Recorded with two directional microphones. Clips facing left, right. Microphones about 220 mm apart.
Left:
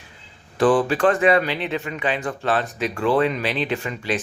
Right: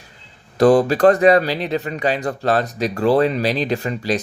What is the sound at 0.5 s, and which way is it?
A man's voice, 40° right (ahead or behind).